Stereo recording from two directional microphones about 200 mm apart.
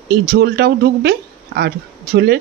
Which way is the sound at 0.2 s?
50° right (ahead or behind).